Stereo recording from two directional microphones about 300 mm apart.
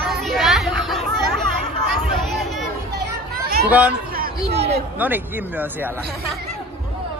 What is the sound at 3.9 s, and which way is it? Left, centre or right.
Speech, right.